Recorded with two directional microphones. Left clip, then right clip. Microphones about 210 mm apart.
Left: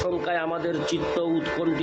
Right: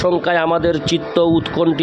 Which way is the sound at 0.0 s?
55° right (ahead or behind).